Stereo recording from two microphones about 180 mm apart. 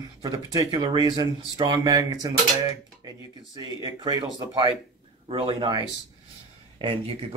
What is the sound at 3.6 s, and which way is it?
Speech, 20° right (ahead or behind).